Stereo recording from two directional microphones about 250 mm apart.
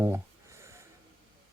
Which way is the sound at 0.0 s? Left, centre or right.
Centre.